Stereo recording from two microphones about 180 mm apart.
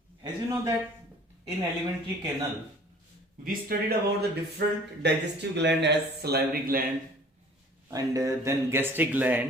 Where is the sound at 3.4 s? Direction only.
55° right (ahead or behind).